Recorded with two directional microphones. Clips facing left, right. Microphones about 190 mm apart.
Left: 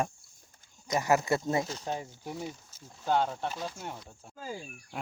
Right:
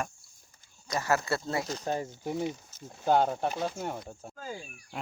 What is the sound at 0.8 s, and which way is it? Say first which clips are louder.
Speech: left 2 dB; 20° left (ahead or behind).